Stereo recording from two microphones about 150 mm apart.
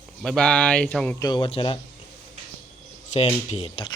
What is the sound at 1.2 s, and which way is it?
Speech, 30° left (ahead or behind).